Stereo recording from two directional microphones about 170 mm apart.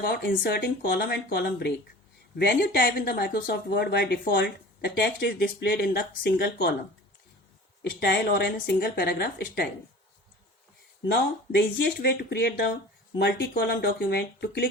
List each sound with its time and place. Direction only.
0.0 s speech: 65° left (ahead or behind)
5.0 s speech: 85° left; by 6.7 s 65° left (ahead or behind)
7.8 s speech: 75° left (ahead or behind)
11.8 s speech: 65° left (ahead or behind)
13.1 s speech: 80° left